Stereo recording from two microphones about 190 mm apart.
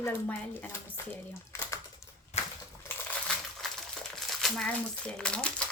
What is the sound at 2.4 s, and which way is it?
Crushing, 35° left (ahead or behind).